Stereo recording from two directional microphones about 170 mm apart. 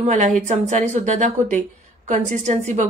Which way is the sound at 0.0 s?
45° right (ahead or behind).